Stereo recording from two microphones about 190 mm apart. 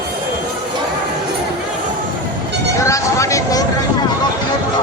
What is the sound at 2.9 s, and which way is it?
Vehicle, 15° left (ahead or behind).